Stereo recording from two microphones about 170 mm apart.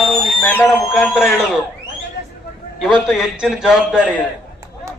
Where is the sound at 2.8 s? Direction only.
Centre (ahead or behind).